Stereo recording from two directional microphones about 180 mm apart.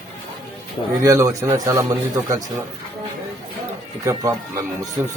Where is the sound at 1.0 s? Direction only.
15° right (ahead or behind).